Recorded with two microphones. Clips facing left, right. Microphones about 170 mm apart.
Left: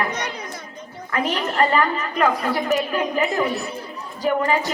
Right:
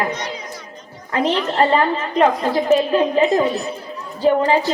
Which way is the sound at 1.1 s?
25° right (ahead or behind).